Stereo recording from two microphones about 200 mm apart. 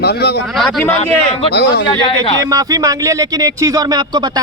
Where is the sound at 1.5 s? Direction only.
55° left (ahead or behind).